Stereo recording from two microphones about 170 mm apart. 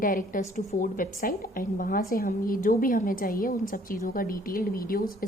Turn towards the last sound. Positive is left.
turn(degrees=60)  # may be behind; listen again after turning